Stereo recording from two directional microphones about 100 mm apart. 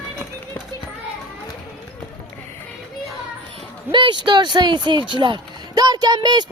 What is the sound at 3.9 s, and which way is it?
Speech, 55° right (ahead or behind).